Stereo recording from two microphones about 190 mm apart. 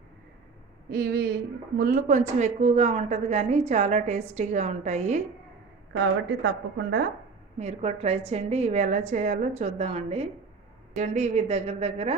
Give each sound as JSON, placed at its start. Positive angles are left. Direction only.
{"t": 0.9, "sound": "a woman's voice", "side_deg": -55}
{"t": 6.4, "sound": "speech", "side_deg": -65}
{"t": 7.6, "sound": "a woman's voice", "side_deg": -35}